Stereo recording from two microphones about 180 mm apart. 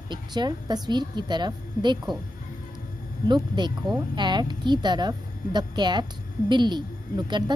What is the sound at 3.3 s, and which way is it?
A woman's voice, 25° right (ahead or behind).